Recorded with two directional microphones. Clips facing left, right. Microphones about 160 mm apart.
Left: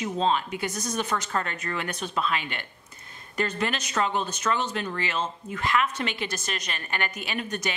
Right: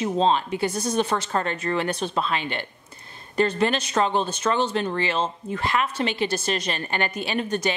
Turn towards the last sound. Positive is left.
turn(degrees=-30)  # may be behind; listen again after turning